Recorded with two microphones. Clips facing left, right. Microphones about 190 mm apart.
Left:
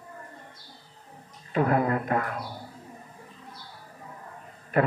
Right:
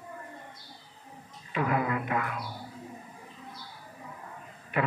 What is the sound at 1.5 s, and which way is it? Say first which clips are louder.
Speech: left 5 dB; 40° left (ahead or behind).